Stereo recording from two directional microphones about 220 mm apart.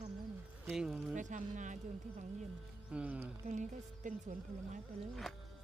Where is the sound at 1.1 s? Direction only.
35° right (ahead or behind).